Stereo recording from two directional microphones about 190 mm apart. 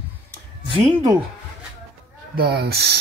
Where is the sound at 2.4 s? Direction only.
55° right (ahead or behind).